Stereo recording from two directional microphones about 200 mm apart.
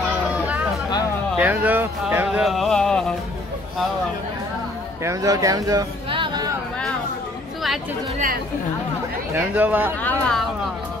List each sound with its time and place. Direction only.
1.4 s speech: 10° right (ahead or behind)
5.0 s speech: 15° right (ahead or behind)
9.3 s speech: 10° right (ahead or behind)